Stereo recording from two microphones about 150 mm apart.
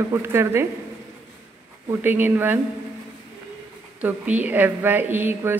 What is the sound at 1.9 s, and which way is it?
Speech, 15° right (ahead or behind).